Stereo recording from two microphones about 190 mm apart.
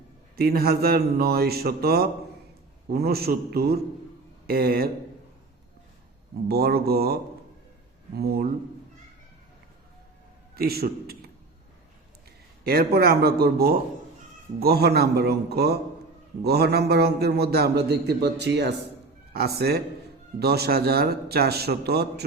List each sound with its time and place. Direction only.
0.3 s a man's voice: 55° right (ahead or behind)
6.5 s a man's voice: 55° right (ahead or behind)
10.5 s a man's voice: 55° right (ahead or behind)
12.6 s a man's voice: 55° right (ahead or behind)